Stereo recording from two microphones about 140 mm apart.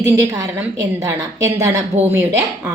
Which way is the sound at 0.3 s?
25° right (ahead or behind).